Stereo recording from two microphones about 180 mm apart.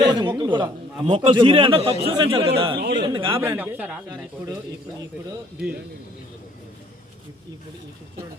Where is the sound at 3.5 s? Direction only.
10° right (ahead or behind).